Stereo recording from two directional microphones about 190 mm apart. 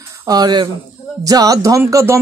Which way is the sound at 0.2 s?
20° right (ahead or behind).